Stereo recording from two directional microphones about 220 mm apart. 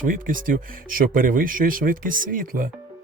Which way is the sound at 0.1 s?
35° right (ahead or behind).